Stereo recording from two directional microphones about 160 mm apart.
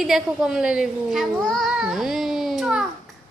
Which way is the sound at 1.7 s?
5° right (ahead or behind).